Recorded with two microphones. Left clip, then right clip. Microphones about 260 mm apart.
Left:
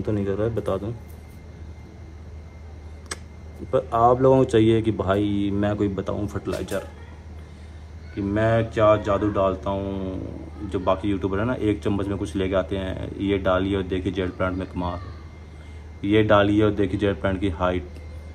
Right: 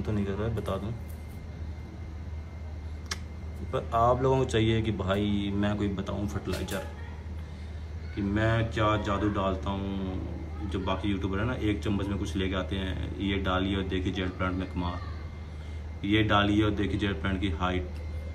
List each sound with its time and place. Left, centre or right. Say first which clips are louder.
0.0 s speech: left 8 dB; centre
3.7 s speech: left 7 dB; centre
8.2 s speech: left 7 dB; centre
16.0 s speech: left 7 dB; centre